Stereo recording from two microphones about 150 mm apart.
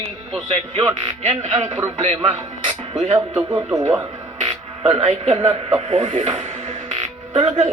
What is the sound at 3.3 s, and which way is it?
Speech, 20° right (ahead or behind).